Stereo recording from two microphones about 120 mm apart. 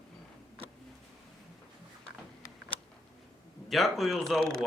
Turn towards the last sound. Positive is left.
turn(degrees=5)  # may be behind; listen again after turning